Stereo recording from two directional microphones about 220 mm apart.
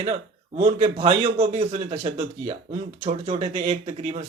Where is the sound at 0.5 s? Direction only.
30° right (ahead or behind).